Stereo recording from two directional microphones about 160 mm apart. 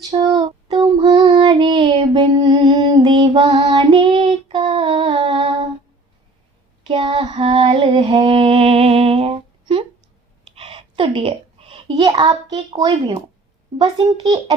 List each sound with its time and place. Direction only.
0.1 s child singing: 25° right (ahead or behind)
6.8 s a sound: 35° right (ahead or behind)
13.8 s a child's voice: 30° right (ahead or behind)